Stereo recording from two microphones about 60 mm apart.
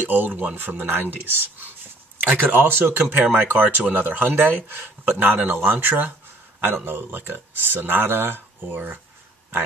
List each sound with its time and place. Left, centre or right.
0.0 s speech: right
2.3 s speech: right